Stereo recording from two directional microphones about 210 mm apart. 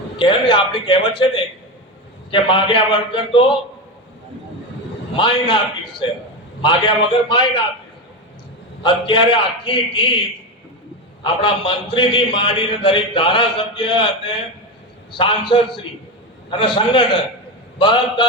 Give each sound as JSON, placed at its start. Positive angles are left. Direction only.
{"t": 0.2, "sound": "a man's voice", "side_deg": 25}
{"t": 5.1, "sound": "a man's voice", "side_deg": 25}
{"t": 6.6, "sound": "a man's voice", "side_deg": 25}
{"t": 8.8, "sound": "a man's voice", "side_deg": 25}
{"t": 11.2, "sound": "a man's voice", "side_deg": 25}